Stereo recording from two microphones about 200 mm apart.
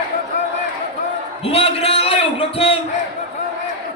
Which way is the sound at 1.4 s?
30° left (ahead or behind).